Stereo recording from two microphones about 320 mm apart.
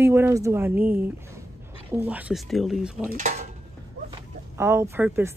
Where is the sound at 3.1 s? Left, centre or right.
Right.